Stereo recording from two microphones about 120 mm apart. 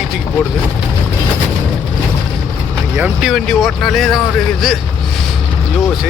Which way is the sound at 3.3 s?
5° left (ahead or behind).